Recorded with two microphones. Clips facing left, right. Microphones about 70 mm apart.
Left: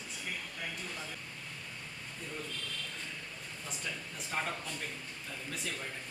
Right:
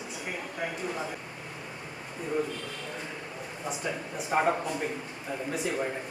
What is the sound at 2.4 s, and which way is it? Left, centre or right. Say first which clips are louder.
Speech: right 10 dB; centre.